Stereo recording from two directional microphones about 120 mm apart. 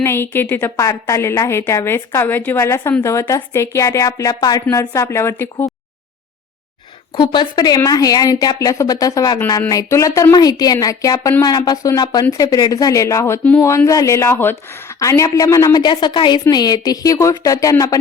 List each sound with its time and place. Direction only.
0.0 s a woman's voice: 20° left (ahead or behind)
0.8 s a woman's voice: 25° left (ahead or behind)
7.2 s a woman's voice: 40° left (ahead or behind)